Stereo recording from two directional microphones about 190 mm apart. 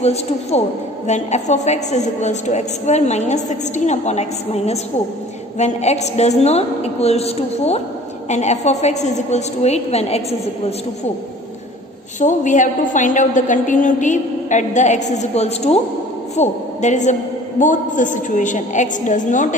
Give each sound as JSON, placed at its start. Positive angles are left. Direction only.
{"t": 0.0, "sound": "a woman's voice", "side_deg": 35}
{"t": 12.2, "sound": "a woman's voice", "side_deg": 40}